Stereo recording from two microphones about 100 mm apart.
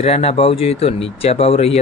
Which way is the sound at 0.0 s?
90° left.